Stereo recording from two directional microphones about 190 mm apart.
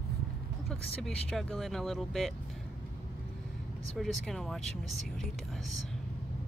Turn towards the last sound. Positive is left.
turn(degrees=0)  # may be behind; listen again after turning